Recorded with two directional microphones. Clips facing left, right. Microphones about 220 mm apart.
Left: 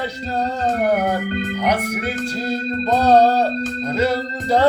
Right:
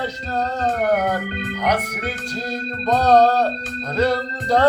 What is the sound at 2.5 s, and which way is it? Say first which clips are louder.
Speech: left 1 dB; 10° left (ahead or behind).